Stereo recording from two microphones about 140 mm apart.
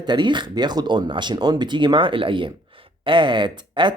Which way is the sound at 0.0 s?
35° right (ahead or behind).